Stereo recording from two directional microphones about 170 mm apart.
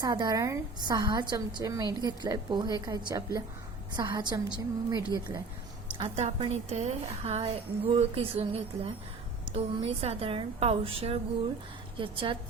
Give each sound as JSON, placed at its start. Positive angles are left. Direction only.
{"t": 0.0, "sound": "a woman's voice", "side_deg": -25}